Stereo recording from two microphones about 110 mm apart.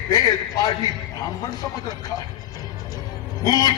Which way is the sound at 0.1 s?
35° left (ahead or behind).